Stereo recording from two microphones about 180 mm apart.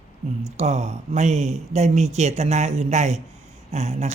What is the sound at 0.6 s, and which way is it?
Speech, 40° right (ahead or behind).